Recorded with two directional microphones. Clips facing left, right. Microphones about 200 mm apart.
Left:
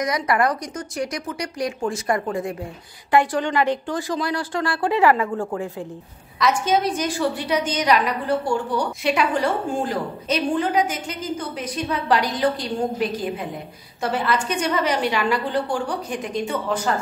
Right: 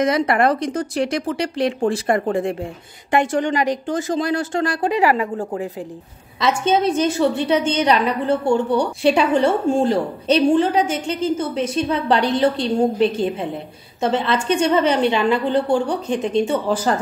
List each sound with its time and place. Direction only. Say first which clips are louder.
0.0 s a woman's voice: right 4 dB; 25° right (ahead or behind)
6.4 s a woman's voice: right 2 dB; 25° right (ahead or behind)